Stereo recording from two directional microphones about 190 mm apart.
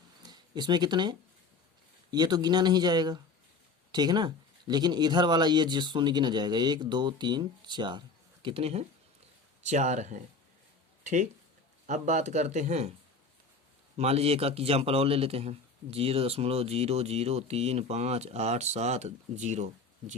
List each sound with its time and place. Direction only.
0.2 s a sound: 20° right (ahead or behind)
2.0 s a man's voice: 20° right (ahead or behind); by 12.9 s 35° right (ahead or behind)
13.9 s a man's voice: 35° right (ahead or behind)